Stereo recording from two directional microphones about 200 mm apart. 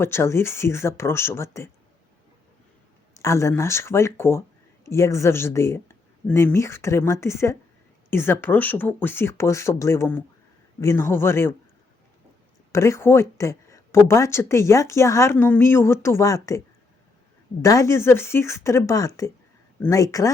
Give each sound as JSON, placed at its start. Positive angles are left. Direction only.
{"t": 0.0, "sound": "speech", "side_deg": 10}
{"t": 3.2, "sound": "speech", "side_deg": 15}
{"t": 12.7, "sound": "speech", "side_deg": 15}